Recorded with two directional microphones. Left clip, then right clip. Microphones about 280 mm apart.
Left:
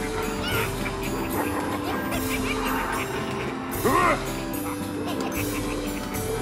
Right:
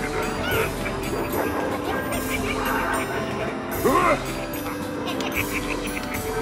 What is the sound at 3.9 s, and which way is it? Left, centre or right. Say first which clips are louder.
Music: right 2 dB; left.